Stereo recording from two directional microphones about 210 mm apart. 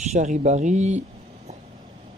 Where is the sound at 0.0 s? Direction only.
35° right (ahead or behind).